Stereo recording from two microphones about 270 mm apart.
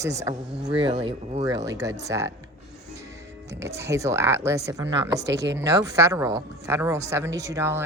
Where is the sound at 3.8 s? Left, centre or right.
Centre.